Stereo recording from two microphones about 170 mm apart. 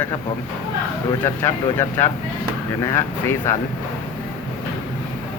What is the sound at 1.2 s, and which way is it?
Speech, 15° left (ahead or behind).